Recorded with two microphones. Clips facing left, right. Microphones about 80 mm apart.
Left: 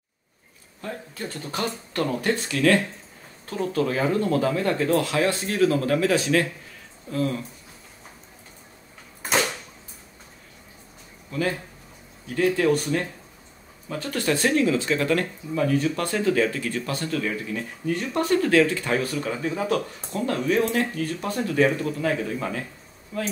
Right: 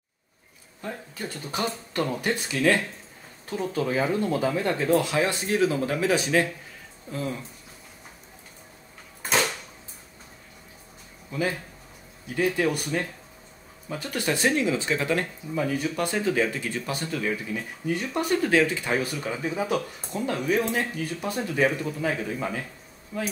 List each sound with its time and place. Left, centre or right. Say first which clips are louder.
0.8 s speech: left 1 dB; centre
11.3 s speech: left 2 dB; centre